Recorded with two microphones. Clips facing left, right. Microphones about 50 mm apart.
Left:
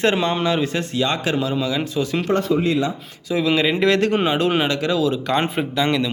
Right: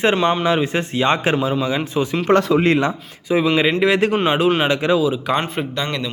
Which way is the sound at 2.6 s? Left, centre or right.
Right.